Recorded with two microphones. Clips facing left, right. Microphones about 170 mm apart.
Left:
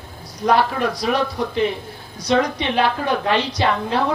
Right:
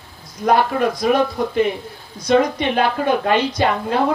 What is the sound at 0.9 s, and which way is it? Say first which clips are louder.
A woman's voice: right 4 dB; 50° right (ahead or behind).